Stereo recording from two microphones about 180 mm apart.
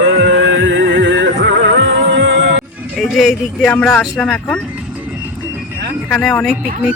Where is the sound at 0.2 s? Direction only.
90° right.